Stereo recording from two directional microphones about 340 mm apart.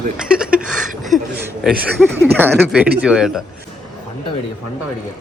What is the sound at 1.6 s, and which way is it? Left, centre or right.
Speech, centre.